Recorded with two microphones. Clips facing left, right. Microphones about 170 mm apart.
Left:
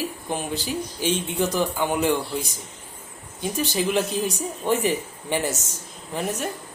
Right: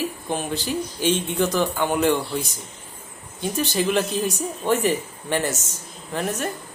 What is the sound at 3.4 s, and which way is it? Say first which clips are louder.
A man's voice: right 1 dB; 10° left (ahead or behind).